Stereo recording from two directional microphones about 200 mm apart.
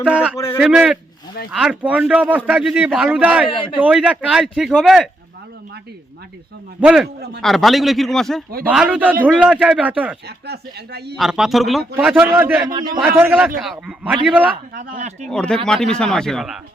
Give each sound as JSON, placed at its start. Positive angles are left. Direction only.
{"t": 0.0, "sound": "a man's voice", "side_deg": -5}
{"t": 3.5, "sound": "a man's voice", "side_deg": 25}
{"t": 3.8, "sound": "a man's voice", "side_deg": -5}
{"t": 6.7, "sound": "a man's voice", "side_deg": -5}
{"t": 10.2, "sound": "speech", "side_deg": -55}
{"t": 11.2, "sound": "a man's voice", "side_deg": 0}
{"t": 14.8, "sound": "speech", "side_deg": -40}
{"t": 15.3, "sound": "a man's voice", "side_deg": 5}